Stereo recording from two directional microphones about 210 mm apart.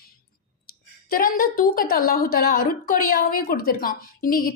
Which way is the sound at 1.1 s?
40° left (ahead or behind).